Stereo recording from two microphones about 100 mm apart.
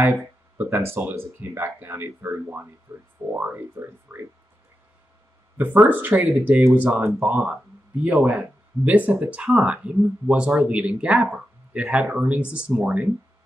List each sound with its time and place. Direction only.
0.6 s speech: 20° right (ahead or behind)
5.6 s speech: 15° right (ahead or behind)